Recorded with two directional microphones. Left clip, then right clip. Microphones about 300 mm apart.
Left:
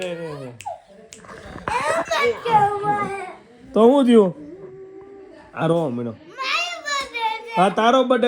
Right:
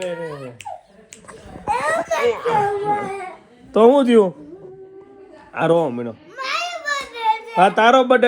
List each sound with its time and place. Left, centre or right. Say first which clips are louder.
0.0 s a man's voice: right 2 dB; left
1.7 s baby cry: right 2 dB; centre
3.7 s a man's voice: right 2 dB; centre
3.9 s a man's voice: right 1 dB; left
5.5 s a sound: right 4 dB; centre
7.8 s a man's voice: right 4 dB; centre